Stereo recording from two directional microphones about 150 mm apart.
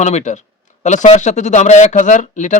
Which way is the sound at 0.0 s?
50° left (ahead or behind).